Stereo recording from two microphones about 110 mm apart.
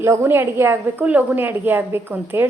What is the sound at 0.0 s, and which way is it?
A woman's voice, 25° right (ahead or behind).